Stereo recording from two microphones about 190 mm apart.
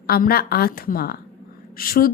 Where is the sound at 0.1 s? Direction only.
50° left (ahead or behind).